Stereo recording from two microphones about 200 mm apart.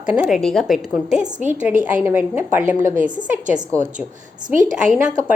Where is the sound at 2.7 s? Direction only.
40° right (ahead or behind).